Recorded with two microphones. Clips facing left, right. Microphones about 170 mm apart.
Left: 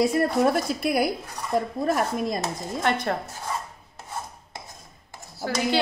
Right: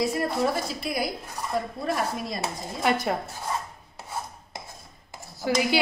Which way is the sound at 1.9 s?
45° left (ahead or behind).